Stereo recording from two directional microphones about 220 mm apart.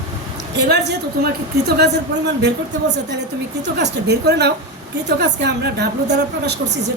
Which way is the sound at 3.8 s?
50° right (ahead or behind).